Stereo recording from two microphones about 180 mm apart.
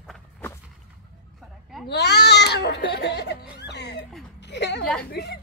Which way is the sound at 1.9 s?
65° left (ahead or behind).